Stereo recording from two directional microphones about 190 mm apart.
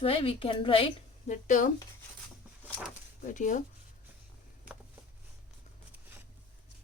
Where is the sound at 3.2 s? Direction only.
40° left (ahead or behind).